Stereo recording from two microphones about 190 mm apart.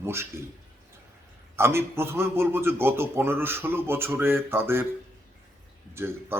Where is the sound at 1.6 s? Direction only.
15° right (ahead or behind).